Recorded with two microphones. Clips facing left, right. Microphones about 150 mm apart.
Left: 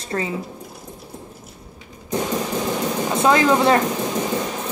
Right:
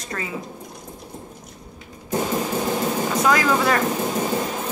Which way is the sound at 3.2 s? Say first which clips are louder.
Left 4 dB; 25° left (ahead or behind).